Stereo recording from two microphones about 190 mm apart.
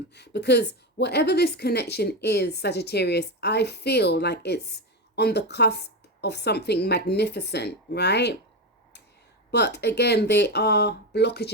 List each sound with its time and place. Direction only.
0.1 s a woman's voice: 60° left (ahead or behind)
9.5 s a woman's voice: 60° left (ahead or behind)